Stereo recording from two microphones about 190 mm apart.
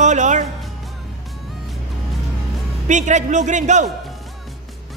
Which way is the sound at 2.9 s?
40° right (ahead or behind).